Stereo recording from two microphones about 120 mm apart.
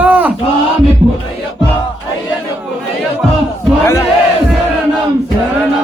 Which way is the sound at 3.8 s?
25° left (ahead or behind).